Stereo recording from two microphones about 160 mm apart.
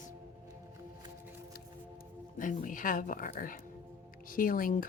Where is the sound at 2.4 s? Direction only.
55° left (ahead or behind).